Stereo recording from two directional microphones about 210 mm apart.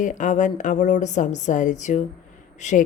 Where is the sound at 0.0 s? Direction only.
35° left (ahead or behind).